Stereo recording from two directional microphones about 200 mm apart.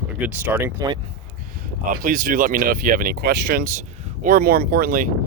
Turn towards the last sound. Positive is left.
turn(degrees=-45)  # may be behind; listen again after turning